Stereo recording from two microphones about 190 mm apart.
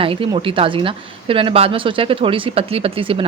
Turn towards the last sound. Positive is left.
turn(degrees=-30)  # may be behind; listen again after turning